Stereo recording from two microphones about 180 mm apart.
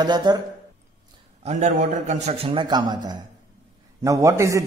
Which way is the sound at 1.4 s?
40° right (ahead or behind).